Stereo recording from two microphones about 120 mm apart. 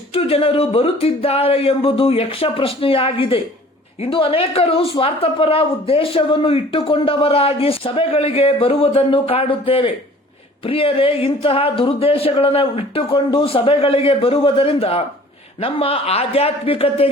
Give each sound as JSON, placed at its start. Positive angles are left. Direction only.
{"t": 0.1, "sound": "a woman's voice", "side_deg": 55}